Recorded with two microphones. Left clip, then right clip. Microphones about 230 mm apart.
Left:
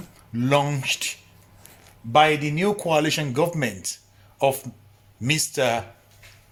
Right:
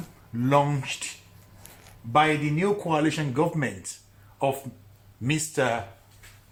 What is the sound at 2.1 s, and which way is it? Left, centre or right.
Speech, left.